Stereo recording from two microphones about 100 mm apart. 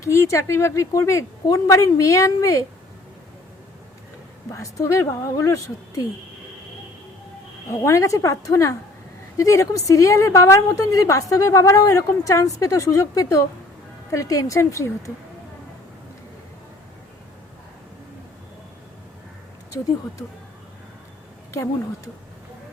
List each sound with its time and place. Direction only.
0.0 s a woman's voice: 30° left (ahead or behind)
4.5 s a woman's voice: 30° left (ahead or behind)
7.8 s a woman's voice: 35° left (ahead or behind)
21.5 s a woman's voice: 30° left (ahead or behind)